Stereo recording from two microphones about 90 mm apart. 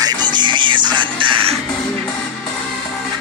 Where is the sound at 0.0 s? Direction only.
55° right (ahead or behind); by 1.5 s 75° right (ahead or behind).